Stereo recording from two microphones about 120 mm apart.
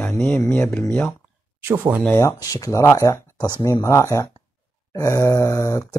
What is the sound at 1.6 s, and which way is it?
Speech, 20° right (ahead or behind).